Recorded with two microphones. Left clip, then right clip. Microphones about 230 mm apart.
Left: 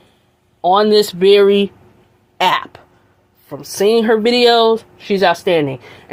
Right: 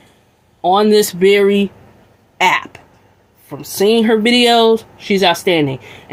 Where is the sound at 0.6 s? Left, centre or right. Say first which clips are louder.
Even; left.